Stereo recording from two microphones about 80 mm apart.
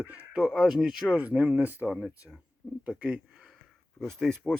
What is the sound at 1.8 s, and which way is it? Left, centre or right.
Speech, centre.